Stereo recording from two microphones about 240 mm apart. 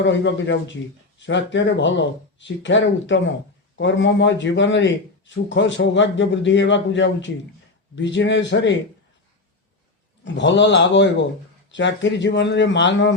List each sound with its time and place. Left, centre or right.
0.0 s a man's voice: left
10.2 s a man's voice: left